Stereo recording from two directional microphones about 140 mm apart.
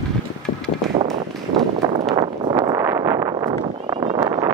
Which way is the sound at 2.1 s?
35° right (ahead or behind).